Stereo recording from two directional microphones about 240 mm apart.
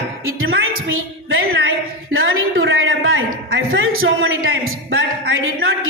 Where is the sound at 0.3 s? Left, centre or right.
Right.